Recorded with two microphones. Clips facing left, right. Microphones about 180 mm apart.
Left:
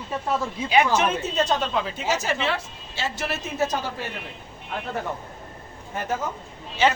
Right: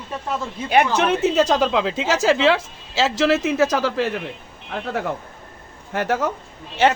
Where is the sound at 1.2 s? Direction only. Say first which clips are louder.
Right 7 dB; 90° right.